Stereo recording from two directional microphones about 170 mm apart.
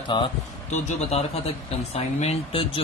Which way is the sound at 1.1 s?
40° left (ahead or behind).